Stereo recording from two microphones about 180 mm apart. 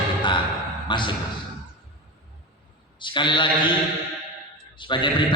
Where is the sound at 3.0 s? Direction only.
25° left (ahead or behind).